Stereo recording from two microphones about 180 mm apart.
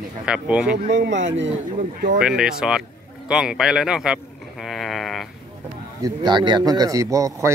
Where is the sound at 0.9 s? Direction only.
85° right.